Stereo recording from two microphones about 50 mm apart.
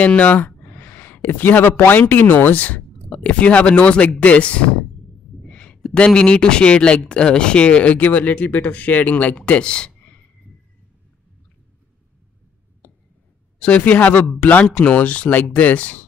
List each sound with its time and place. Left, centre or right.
0.0 s a man's voice: left
5.5 s a sound: left
5.9 s speech: left
9.4 s speech: centre
13.6 s speech: left